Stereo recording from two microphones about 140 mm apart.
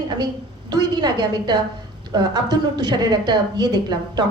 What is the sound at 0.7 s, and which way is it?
A woman's voice, 30° right (ahead or behind).